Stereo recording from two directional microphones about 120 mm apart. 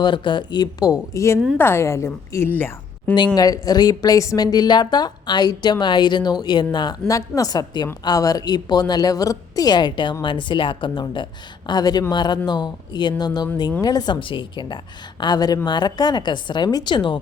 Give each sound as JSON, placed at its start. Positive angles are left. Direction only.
{"t": 0.0, "sound": "a woman's voice", "side_deg": 40}
{"t": 3.3, "sound": "a woman's voice", "side_deg": 30}